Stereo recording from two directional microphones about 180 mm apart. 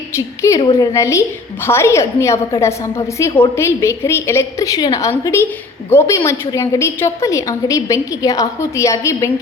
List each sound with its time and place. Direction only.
0.1 s a woman's voice: 15° left (ahead or behind)
0.6 s a woman's voice: 25° left (ahead or behind)
0.9 s a woman's voice: 15° left (ahead or behind)